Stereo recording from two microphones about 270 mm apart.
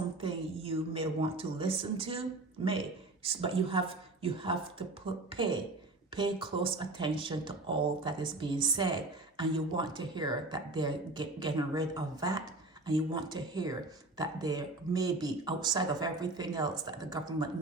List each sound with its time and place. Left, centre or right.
0.2 s speech: centre